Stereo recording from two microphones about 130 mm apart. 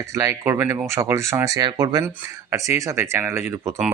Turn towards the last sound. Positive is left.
turn(degrees=-20)  # may be behind; listen again after turning